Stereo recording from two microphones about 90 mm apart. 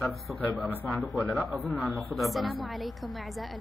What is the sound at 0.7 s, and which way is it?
Speech, 20° left (ahead or behind).